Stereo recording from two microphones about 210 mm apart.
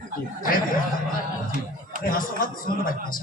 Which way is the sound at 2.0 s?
40° left (ahead or behind).